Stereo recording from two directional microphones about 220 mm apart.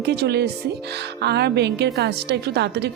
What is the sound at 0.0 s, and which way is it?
A woman's voice, 50° right (ahead or behind).